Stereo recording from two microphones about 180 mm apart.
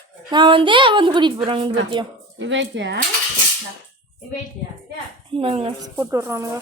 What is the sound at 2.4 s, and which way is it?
Speech, 90° right.